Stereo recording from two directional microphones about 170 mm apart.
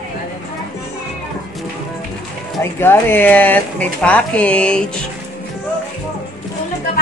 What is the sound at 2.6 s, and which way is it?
Speech, 15° left (ahead or behind).